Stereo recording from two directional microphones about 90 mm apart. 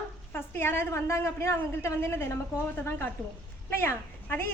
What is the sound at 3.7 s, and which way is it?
Speech, 25° left (ahead or behind).